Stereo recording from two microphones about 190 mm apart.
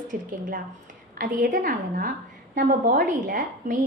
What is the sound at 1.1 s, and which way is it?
A woman's voice, 45° right (ahead or behind).